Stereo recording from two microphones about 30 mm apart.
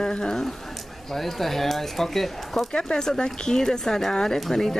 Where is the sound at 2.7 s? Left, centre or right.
Left.